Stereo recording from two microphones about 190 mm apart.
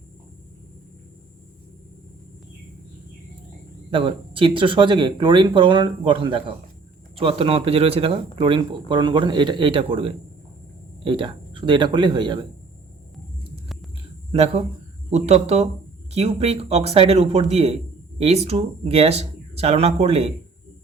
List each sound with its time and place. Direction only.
3.9 s speech: 25° right (ahead or behind)
14.3 s speech: 35° right (ahead or behind)